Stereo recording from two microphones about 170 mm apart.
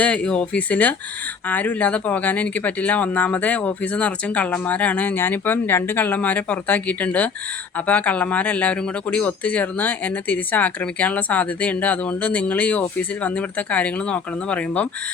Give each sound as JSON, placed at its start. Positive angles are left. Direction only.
{"t": 0.0, "sound": "speech", "side_deg": 5}